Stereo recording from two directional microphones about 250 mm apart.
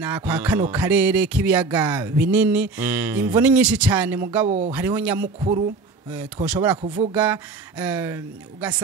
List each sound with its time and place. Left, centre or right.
0.0 s music: centre
4.5 s speech: right
4.7 s music: centre
5.4 s speech: centre
6.1 s speech: centre
7.8 s music: centre